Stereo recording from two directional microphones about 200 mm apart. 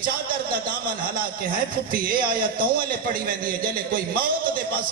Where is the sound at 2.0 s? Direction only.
45° right (ahead or behind).